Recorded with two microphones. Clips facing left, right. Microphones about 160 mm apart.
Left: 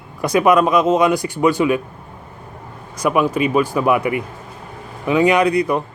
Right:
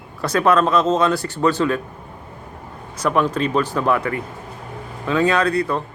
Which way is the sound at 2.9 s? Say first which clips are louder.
Left 2 dB; 10° left (ahead or behind).